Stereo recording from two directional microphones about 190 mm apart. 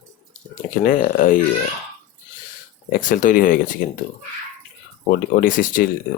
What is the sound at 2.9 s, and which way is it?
Speech, 45° left (ahead or behind).